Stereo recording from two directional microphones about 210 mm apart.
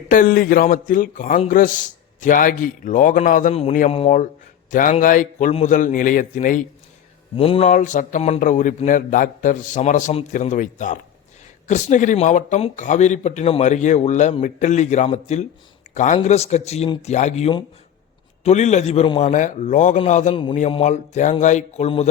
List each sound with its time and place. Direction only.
0.1 s a man's voice: 40° left (ahead or behind)
7.3 s a man's voice: 25° left (ahead or behind)